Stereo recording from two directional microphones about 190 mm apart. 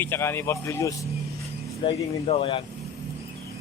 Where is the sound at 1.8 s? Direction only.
30° left (ahead or behind).